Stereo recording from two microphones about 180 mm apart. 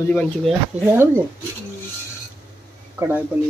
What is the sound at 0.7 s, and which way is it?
Speech, 40° right (ahead or behind).